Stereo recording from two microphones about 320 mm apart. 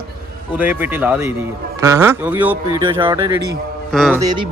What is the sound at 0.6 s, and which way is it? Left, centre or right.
A man's voice, centre.